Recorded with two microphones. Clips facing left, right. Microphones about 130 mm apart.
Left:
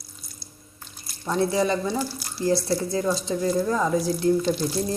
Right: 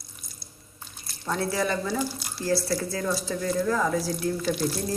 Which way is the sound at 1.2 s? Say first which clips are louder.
Left 4 dB; 20° left (ahead or behind).